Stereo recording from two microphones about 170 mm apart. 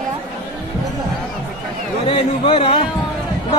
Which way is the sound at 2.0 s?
35° left (ahead or behind).